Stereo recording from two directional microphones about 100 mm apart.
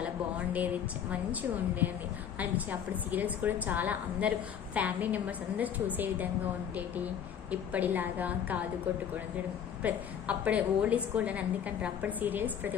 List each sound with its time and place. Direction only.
0.0 s a woman's voice: 15° right (ahead or behind)
9.8 s a woman's voice: 15° right (ahead or behind)